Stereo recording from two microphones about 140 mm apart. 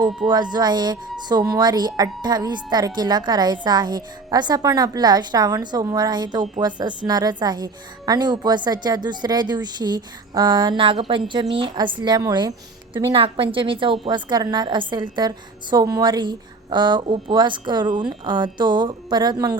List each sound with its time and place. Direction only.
0.3 s a woman's voice: 30° right (ahead or behind)
13.1 s a woman's voice: 40° right (ahead or behind)